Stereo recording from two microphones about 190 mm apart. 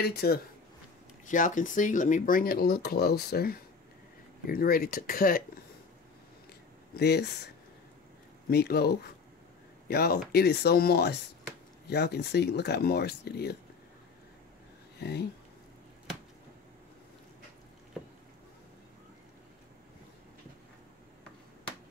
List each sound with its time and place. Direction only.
0.0 s speech: 55° left (ahead or behind)
1.2 s speech: 40° left (ahead or behind)
6.9 s speech: 60° left (ahead or behind)
15.0 s speech: 60° left (ahead or behind)